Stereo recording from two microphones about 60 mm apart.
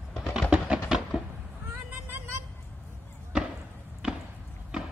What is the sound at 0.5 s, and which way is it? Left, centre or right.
Music, centre.